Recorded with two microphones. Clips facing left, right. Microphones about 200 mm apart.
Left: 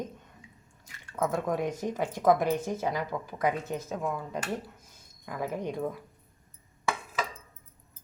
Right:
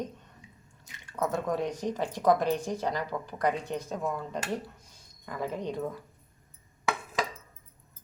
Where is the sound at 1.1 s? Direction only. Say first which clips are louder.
Left 1 dB; 5° left (ahead or behind).